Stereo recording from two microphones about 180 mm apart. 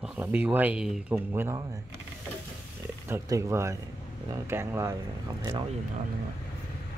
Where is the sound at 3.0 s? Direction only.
15° right (ahead or behind).